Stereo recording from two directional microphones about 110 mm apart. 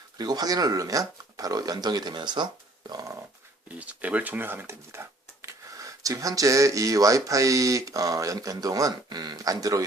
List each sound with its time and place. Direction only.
0.2 s speech: 35° right (ahead or behind)
3.7 s speech: 15° right (ahead or behind); by 9.8 s 35° right (ahead or behind)